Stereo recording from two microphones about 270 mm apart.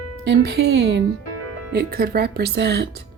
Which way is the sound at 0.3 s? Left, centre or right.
Right.